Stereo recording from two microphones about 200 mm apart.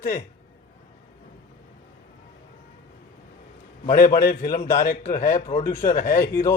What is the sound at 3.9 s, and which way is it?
Speech, 45° left (ahead or behind).